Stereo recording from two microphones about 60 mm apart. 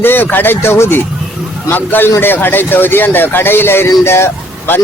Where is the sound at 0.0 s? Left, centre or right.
Left.